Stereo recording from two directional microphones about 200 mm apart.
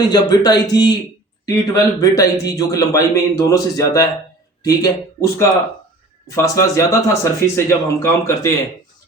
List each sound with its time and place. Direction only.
0.1 s speech: 20° left (ahead or behind)